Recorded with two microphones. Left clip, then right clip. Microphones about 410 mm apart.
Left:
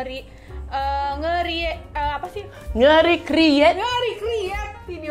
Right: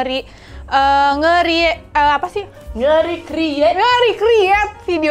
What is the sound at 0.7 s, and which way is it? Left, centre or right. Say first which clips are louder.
A child's voice: right 11 dB; right.